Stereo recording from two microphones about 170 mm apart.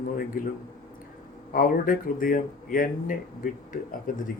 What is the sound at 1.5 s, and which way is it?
Speech, 55° left (ahead or behind).